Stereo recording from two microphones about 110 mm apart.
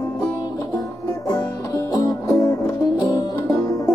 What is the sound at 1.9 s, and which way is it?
Music, 35° left (ahead or behind).